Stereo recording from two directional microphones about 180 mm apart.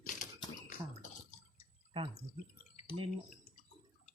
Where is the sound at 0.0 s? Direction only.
45° left (ahead or behind).